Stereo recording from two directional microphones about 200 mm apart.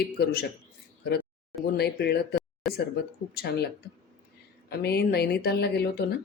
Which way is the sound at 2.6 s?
Centre (ahead or behind).